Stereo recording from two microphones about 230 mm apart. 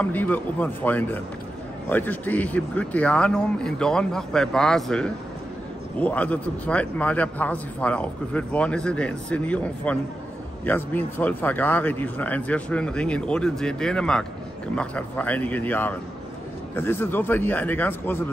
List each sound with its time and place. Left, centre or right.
0.0 s a man's voice: centre